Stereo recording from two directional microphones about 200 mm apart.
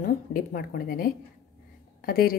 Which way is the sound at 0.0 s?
45° left (ahead or behind).